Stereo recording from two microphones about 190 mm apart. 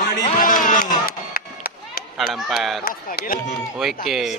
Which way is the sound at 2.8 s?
50° left (ahead or behind).